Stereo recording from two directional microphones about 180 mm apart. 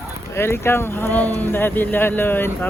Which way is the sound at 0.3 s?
15° left (ahead or behind).